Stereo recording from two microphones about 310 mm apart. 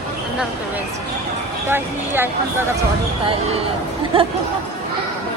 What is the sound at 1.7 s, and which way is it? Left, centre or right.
Speech, centre.